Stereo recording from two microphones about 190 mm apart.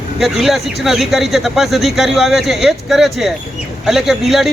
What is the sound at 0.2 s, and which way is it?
A man's voice, centre (ahead or behind).